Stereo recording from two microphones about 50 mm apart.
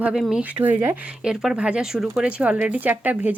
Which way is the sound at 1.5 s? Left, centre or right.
Right.